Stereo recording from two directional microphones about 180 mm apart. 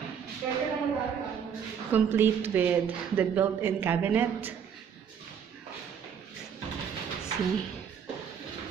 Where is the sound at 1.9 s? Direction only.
10° right (ahead or behind).